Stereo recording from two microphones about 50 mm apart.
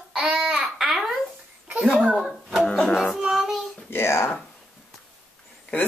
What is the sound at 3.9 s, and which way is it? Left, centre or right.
Speech, left.